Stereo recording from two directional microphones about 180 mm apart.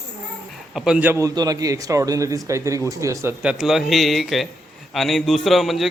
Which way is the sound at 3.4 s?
5° right (ahead or behind).